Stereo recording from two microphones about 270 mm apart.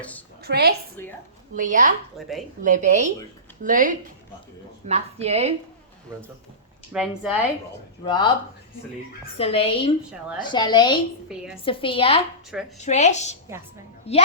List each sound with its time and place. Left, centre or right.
0.4 s a woman's voice: right
2.1 s speech: centre
2.6 s a woman's voice: right
6.9 s speech: centre
8.0 s a woman's voice: centre
9.4 s a woman's voice: left